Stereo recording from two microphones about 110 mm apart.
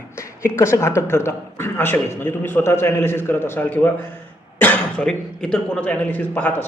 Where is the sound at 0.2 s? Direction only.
25° left (ahead or behind).